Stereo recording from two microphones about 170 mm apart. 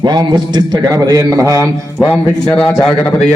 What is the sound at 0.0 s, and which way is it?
A man's voice, 25° right (ahead or behind).